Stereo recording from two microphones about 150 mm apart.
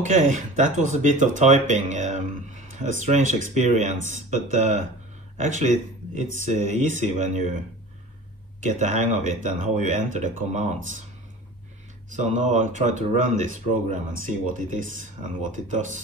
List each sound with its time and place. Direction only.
0.0 s speech: 55° right (ahead or behind)
8.6 s speech: 55° right (ahead or behind)
12.1 s speech: 50° right (ahead or behind)